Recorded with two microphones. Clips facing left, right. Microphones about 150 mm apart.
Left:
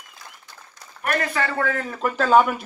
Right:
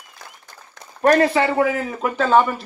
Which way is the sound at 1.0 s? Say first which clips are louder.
Right 9 dB; 30° right (ahead or behind).